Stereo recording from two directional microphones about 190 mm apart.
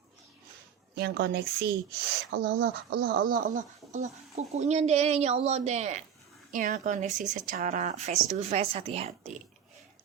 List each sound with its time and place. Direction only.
0.9 s a woman's voice: 60° right (ahead or behind); by 9.3 s 30° right (ahead or behind)